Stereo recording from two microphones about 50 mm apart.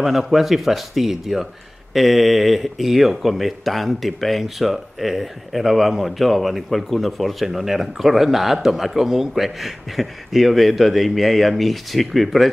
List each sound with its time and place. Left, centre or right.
0.0 s speech: centre